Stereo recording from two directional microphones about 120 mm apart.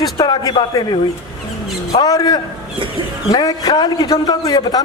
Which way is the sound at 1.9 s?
35° left (ahead or behind).